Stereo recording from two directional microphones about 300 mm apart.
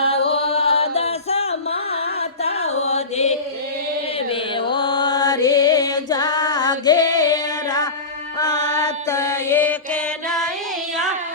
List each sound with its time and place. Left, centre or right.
0.5 s music: centre
8.4 s mantra: centre